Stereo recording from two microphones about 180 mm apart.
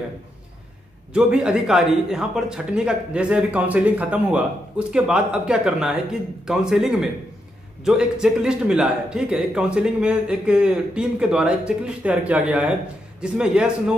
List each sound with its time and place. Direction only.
1.1 s speech: 5° right (ahead or behind)